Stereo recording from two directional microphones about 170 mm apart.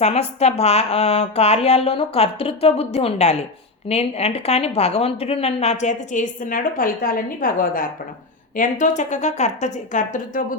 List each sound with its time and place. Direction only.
0.0 s speech: 40° left (ahead or behind)